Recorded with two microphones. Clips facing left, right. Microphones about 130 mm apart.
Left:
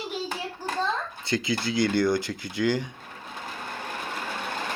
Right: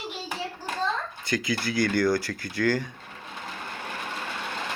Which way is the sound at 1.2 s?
25° left (ahead or behind).